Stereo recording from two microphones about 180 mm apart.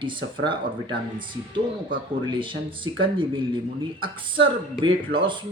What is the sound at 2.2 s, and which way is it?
Speech, 25° right (ahead or behind).